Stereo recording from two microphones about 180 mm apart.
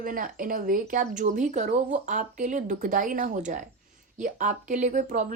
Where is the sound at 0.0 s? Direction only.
50° right (ahead or behind).